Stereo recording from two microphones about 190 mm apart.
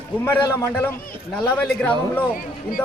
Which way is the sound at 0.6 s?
10° left (ahead or behind).